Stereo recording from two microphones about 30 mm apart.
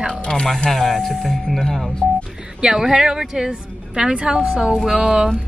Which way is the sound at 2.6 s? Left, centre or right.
Right.